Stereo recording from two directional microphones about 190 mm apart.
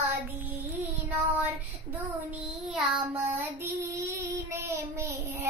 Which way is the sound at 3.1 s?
10° right (ahead or behind).